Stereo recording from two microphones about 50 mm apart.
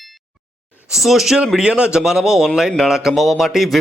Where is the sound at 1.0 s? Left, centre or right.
Centre.